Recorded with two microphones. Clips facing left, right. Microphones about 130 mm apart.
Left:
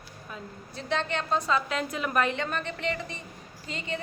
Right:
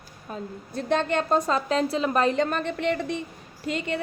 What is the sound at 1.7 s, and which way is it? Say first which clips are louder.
A woman's voice: right 7 dB; 35° right (ahead or behind).